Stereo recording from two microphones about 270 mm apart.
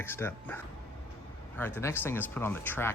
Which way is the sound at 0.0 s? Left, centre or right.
Centre.